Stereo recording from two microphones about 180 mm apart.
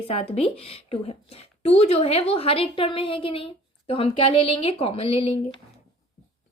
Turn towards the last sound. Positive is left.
turn(degrees=35)  # may be behind; listen again after turning